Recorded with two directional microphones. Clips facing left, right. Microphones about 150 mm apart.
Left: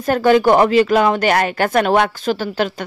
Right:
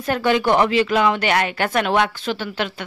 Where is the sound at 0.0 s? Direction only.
40° left (ahead or behind).